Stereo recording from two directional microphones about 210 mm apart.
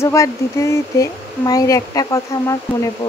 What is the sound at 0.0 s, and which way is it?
Speech, 15° left (ahead or behind).